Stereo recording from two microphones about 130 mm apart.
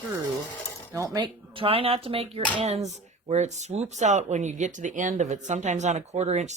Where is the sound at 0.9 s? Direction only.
25° right (ahead or behind).